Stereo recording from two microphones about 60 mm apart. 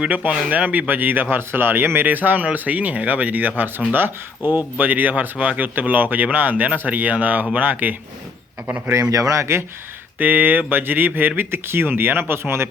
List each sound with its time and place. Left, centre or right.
0.0 s speech: right
9.0 s speech: right
10.2 s speech: right